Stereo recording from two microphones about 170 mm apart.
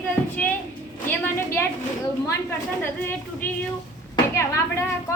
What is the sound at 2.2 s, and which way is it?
Speech, 15° left (ahead or behind).